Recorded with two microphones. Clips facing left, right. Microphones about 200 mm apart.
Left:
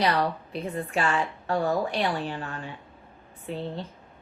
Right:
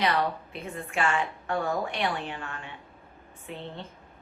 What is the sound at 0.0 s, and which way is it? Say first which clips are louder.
A woman's voice: left 2 dB; 35° left (ahead or behind).